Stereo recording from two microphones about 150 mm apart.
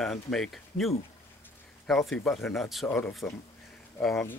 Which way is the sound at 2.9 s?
10° left (ahead or behind).